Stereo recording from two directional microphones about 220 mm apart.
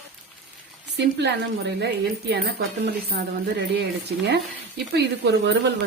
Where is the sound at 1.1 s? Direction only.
50° right (ahead or behind).